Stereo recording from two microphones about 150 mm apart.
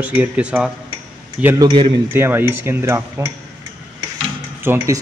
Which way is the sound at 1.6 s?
30° right (ahead or behind).